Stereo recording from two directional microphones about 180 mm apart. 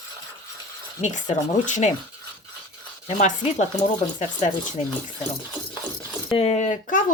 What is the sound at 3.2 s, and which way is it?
Speech, 40° left (ahead or behind).